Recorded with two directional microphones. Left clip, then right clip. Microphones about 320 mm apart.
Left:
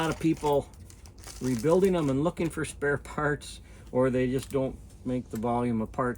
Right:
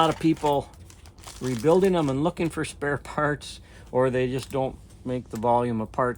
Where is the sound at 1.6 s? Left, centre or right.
Right.